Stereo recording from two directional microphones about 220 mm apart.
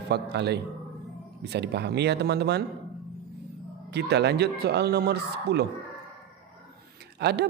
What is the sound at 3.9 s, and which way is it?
Speech, 50° right (ahead or behind).